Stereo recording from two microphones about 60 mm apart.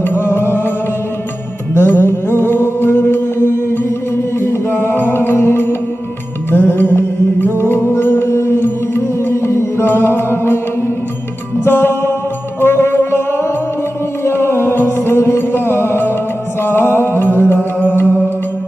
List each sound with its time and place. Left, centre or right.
0.0 s music: left
1.7 s music: left
11.6 s music: left